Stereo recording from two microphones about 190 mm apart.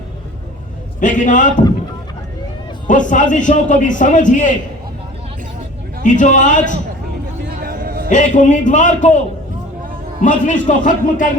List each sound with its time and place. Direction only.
0.9 s a man's voice: 40° left (ahead or behind)
2.8 s a man's voice: 40° left (ahead or behind)
6.0 s a man's voice: 40° left (ahead or behind)
7.4 s a sound: 50° right (ahead or behind)
8.1 s a man's voice: 40° left (ahead or behind)